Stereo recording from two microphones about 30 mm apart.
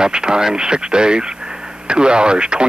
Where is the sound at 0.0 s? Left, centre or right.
Right.